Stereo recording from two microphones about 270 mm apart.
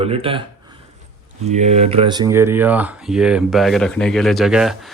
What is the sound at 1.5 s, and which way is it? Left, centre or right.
Speech, right.